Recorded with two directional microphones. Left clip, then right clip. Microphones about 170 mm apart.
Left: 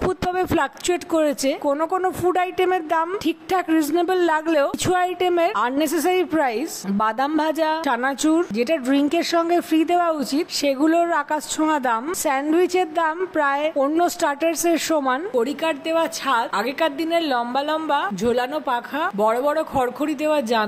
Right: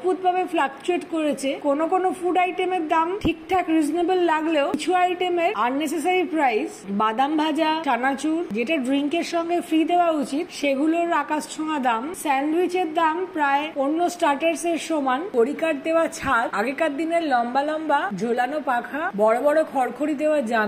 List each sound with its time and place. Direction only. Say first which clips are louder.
0.3 s speech: even; 45° left (ahead or behind)
1.8 s a woman's voice: even; 30° left (ahead or behind)
15.4 s a woman's voice: even; 10° left (ahead or behind)